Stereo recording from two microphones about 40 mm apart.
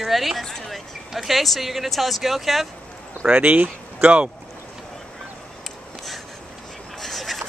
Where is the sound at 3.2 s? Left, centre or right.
Right.